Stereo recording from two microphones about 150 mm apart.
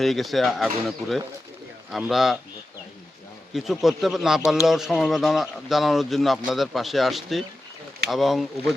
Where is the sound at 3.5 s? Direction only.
Centre (ahead or behind).